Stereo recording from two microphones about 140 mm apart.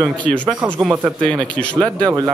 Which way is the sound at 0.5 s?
15° right (ahead or behind).